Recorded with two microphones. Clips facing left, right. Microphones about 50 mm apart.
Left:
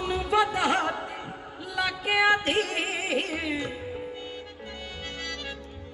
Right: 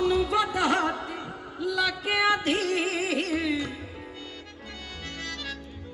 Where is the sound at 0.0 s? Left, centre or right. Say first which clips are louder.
Right 1 dB; left.